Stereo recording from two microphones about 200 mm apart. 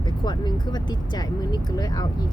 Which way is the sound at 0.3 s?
20° left (ahead or behind).